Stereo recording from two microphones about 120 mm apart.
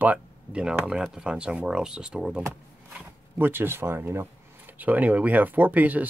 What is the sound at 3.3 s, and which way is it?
Speech, 20° right (ahead or behind).